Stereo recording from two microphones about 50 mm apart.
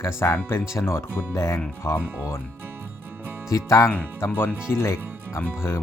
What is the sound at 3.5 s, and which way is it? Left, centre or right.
Speech, left.